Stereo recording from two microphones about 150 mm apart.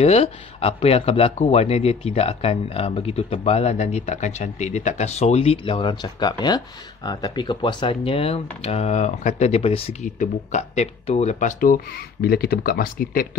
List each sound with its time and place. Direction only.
0.0 s speech: 45° left (ahead or behind); by 13.4 s 75° left (ahead or behind)